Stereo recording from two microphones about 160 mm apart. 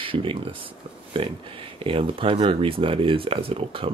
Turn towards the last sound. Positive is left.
turn(degrees=-35)  # may be behind; listen again after turning